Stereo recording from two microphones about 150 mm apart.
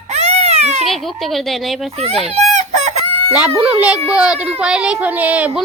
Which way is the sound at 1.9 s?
40° right (ahead or behind).